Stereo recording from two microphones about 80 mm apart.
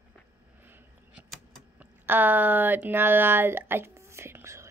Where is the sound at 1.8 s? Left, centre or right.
Right.